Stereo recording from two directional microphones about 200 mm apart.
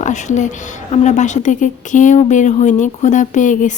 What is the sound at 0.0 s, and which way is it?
A woman's voice, 35° left (ahead or behind).